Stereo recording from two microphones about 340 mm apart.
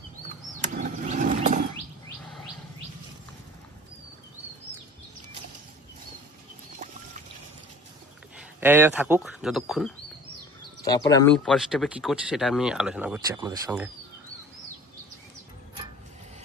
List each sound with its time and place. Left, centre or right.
0.6 s a sound: right
8.4 s speech: centre
10.8 s speech: centre